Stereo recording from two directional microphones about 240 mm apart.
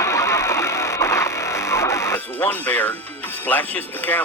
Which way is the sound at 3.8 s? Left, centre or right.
Centre.